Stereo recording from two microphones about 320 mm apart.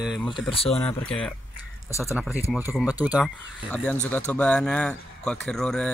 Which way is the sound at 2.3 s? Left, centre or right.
Centre.